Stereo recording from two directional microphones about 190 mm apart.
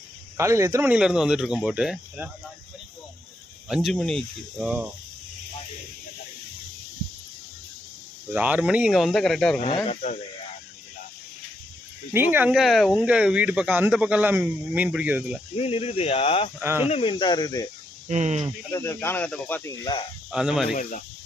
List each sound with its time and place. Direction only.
0.3 s speech: 15° right (ahead or behind)
3.7 s speech: centre (ahead or behind)
8.3 s speech: 10° right (ahead or behind)
9.6 s speech: 35° left (ahead or behind)
12.1 s speech: 10° right (ahead or behind)
15.5 s speech: 30° left (ahead or behind)
16.6 s speech: 10° right (ahead or behind)
16.9 s speech: 25° left (ahead or behind)
18.1 s speech: 40° right (ahead or behind)
18.7 s speech: 15° left (ahead or behind)
19.8 s speech: 25° left (ahead or behind)
20.3 s speech: 5° right (ahead or behind)
20.7 s speech: 45° left (ahead or behind)